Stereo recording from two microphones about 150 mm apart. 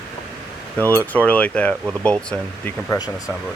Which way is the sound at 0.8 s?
10° left (ahead or behind).